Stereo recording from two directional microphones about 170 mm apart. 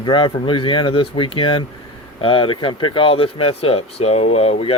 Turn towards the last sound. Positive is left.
turn(degrees=35)  # may be behind; listen again after turning